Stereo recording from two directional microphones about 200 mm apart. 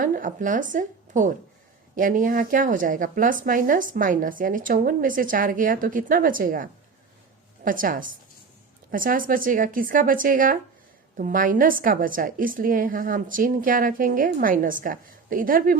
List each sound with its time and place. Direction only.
0.0 s speech: 40° right (ahead or behind)